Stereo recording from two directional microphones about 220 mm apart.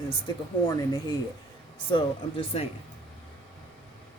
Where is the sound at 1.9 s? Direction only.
25° left (ahead or behind).